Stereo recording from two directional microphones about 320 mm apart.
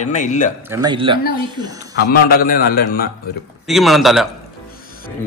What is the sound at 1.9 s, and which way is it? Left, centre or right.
A man's voice, left.